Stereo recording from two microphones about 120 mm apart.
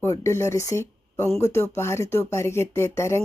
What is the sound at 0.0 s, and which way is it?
Speech, 25° left (ahead or behind).